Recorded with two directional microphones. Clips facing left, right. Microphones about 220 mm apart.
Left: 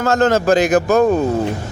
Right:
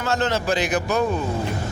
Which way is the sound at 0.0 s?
45° left (ahead or behind).